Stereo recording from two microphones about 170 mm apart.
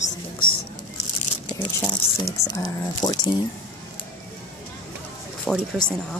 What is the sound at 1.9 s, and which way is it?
Speech, 20° left (ahead or behind).